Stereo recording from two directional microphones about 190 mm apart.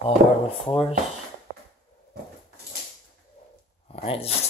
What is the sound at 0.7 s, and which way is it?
Speech, 30° left (ahead or behind).